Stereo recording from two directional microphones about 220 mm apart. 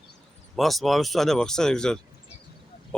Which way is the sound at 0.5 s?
Centre (ahead or behind).